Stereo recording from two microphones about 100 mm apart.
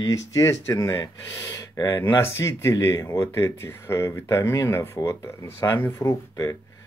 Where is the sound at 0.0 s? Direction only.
35° left (ahead or behind).